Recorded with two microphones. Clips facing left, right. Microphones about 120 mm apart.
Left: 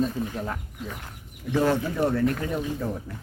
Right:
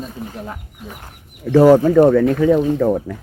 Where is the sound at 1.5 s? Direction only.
90° right.